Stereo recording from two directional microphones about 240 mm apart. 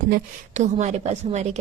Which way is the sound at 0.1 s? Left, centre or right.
Right.